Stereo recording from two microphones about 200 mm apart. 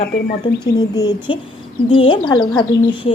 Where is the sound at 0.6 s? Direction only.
20° left (ahead or behind).